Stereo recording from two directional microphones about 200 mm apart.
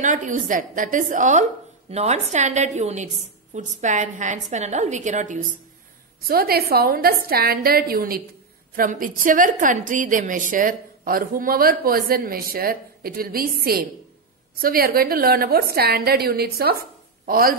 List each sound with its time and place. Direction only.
0.0 s a woman's voice: 40° right (ahead or behind)